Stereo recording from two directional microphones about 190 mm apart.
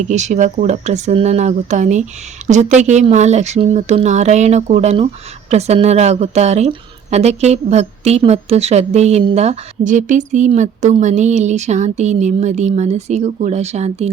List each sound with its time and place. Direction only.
0.1 s a woman's voice: 40° right (ahead or behind)